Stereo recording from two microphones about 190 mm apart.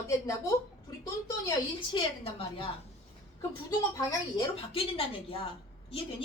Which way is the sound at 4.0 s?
20° left (ahead or behind).